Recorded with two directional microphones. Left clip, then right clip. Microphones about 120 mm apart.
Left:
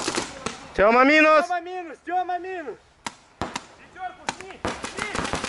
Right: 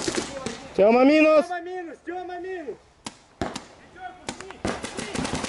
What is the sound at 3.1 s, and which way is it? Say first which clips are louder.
Chop: left 5 dB; 25° left (ahead or behind).